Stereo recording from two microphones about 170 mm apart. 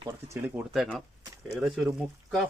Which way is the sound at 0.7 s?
Centre (ahead or behind).